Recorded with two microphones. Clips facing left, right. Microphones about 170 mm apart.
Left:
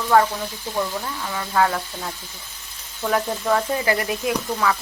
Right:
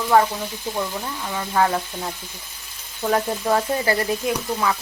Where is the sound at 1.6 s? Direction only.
20° right (ahead or behind).